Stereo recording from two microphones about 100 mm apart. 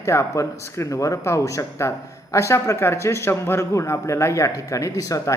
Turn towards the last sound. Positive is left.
turn(degrees=35)  # may be behind; listen again after turning